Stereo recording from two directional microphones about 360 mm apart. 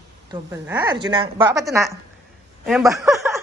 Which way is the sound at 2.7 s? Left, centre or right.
Centre.